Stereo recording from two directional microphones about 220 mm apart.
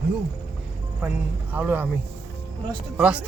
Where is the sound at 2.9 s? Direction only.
5° right (ahead or behind).